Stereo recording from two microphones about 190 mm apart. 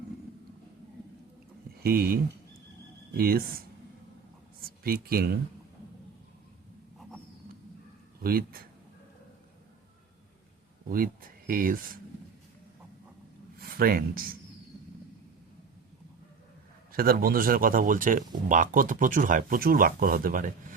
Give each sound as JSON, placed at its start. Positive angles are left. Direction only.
{"t": 1.8, "sound": "speech", "side_deg": -50}
{"t": 4.6, "sound": "speech", "side_deg": -50}
{"t": 8.2, "sound": "speech", "side_deg": -50}
{"t": 10.8, "sound": "speech", "side_deg": -50}
{"t": 13.6, "sound": "speech", "side_deg": -50}
{"t": 16.9, "sound": "speech", "side_deg": -50}